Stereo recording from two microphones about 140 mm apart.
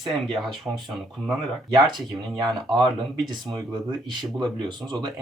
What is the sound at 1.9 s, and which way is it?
Speech, 35° right (ahead or behind).